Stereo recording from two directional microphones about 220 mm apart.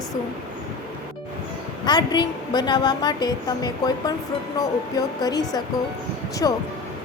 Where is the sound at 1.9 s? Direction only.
20° left (ahead or behind).